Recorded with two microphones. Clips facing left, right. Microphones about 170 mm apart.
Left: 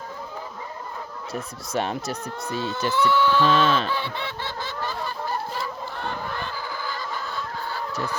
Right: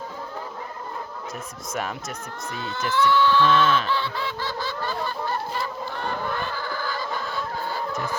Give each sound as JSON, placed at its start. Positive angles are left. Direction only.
{"t": 1.3, "sound": "speech", "side_deg": 30}
{"t": 2.9, "sound": "a sound", "side_deg": 15}
{"t": 3.4, "sound": "speech", "side_deg": 30}
{"t": 3.9, "sound": "snicker", "side_deg": 20}